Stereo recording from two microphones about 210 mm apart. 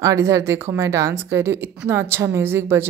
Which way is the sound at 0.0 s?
15° right (ahead or behind).